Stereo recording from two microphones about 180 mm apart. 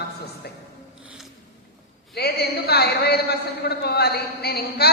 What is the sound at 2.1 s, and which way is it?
A man's voice, 60° left (ahead or behind).